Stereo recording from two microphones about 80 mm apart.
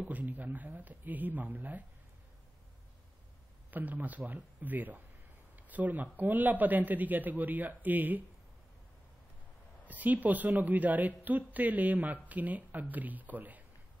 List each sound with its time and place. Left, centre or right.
0.0 s a woman's voice: right
3.7 s a woman's voice: right
9.8 s a woman's voice: right